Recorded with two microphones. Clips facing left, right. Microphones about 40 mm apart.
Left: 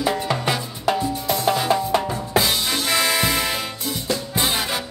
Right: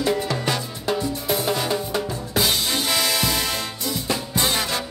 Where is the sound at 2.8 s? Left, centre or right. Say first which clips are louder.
Left 4 dB; centre.